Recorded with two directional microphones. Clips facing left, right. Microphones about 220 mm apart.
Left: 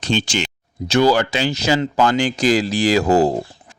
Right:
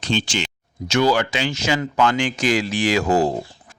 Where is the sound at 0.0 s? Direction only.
45° left (ahead or behind).